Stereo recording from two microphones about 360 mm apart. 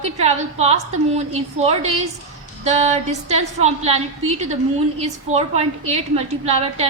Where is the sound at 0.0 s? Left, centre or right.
Centre.